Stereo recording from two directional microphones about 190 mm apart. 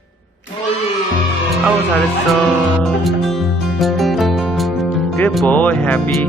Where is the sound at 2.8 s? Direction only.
Centre (ahead or behind).